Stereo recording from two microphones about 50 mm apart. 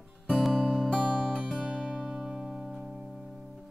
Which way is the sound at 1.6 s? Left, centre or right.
Right.